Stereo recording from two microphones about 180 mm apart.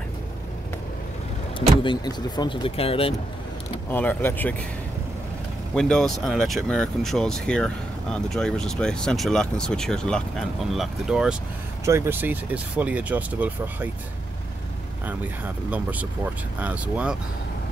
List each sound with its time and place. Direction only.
1.8 s speech: 25° left (ahead or behind)
3.9 s speech: 10° left (ahead or behind)
5.8 s speech: 5° left (ahead or behind)
11.8 s speech: 15° right (ahead or behind)
15.0 s speech: 10° right (ahead or behind)